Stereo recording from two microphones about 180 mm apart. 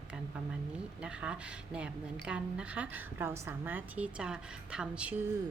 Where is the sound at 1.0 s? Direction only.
5° right (ahead or behind).